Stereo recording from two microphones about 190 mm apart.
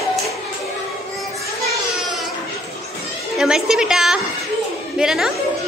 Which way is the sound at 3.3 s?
5° right (ahead or behind).